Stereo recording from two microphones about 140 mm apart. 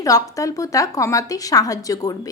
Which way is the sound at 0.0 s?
25° left (ahead or behind).